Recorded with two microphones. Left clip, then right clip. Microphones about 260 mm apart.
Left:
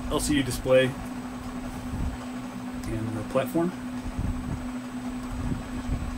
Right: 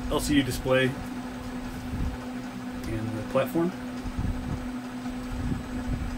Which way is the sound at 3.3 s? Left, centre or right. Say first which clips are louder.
Right 1 dB; left.